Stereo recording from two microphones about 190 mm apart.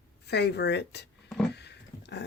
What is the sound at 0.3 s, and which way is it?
Speech, 60° left (ahead or behind).